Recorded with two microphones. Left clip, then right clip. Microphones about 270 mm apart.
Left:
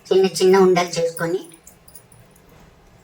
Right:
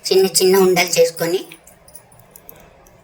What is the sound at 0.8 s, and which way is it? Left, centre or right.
Speech, right.